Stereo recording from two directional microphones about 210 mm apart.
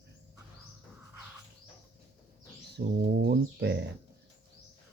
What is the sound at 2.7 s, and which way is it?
Speech, 50° right (ahead or behind).